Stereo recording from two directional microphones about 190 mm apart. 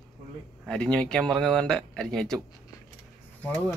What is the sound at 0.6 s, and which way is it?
Speech, 5° left (ahead or behind).